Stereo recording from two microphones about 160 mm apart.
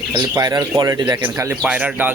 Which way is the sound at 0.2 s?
20° right (ahead or behind).